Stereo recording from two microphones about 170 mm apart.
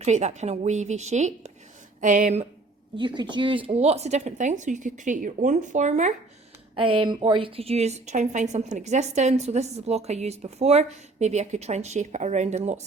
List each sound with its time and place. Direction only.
0.0 s speech: 40° right (ahead or behind)
3.0 s speech: 30° right (ahead or behind); by 6.1 s 45° right (ahead or behind)
6.7 s a woman's voice: 30° right (ahead or behind)